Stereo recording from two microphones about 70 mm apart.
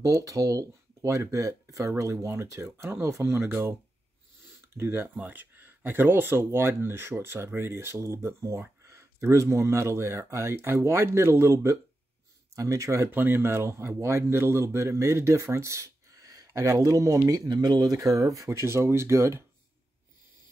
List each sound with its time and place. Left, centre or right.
0.0 s speech: right
4.7 s speech: right
5.0 s speech: right
17.3 s speech: right